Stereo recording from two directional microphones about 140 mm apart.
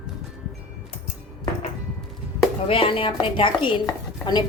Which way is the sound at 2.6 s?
40° left (ahead or behind).